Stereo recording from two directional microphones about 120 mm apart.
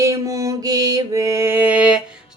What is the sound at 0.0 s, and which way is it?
Mantra, 25° right (ahead or behind).